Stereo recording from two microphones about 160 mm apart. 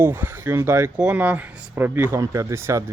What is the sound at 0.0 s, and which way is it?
A man's voice, 10° right (ahead or behind).